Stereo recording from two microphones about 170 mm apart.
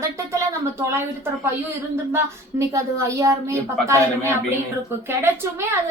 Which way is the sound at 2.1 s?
20° right (ahead or behind).